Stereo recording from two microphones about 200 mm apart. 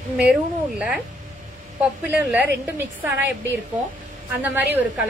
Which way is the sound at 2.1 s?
10° right (ahead or behind).